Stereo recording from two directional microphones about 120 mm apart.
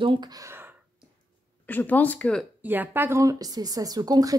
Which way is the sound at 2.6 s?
15° right (ahead or behind).